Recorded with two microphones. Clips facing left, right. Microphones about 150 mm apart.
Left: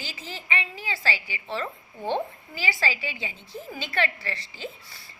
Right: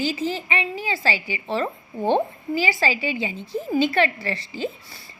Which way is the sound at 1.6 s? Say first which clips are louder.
Right 8 dB; 45° right (ahead or behind).